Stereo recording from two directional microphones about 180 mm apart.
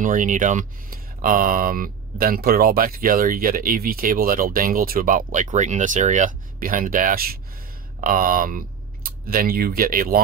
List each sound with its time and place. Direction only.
0.0 s speech: 45° right (ahead or behind)